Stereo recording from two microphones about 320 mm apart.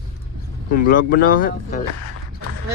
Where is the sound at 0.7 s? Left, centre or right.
Left.